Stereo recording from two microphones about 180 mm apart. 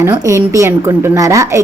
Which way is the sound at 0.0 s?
15° right (ahead or behind).